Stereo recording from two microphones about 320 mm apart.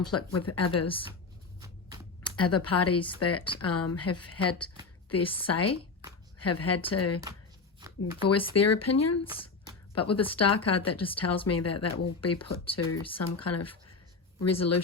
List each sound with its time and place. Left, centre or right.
0.0 s speech: left
0.9 s speech: centre
2.2 s speech: left
7.8 s a sound: centre
8.5 s speech: left
10.9 s speech: centre
11.4 s speech: left